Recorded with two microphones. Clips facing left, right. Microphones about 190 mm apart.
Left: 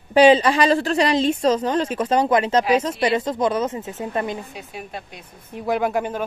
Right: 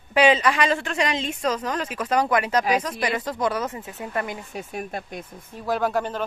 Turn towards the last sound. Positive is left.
turn(degrees=10)  # may be behind; listen again after turning